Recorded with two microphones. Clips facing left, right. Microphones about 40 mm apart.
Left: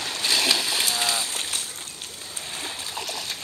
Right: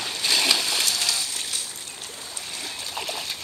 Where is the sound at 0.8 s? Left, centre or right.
Left.